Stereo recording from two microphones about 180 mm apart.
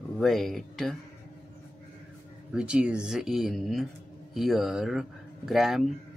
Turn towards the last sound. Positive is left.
turn(degrees=0)  # may be behind; listen again after turning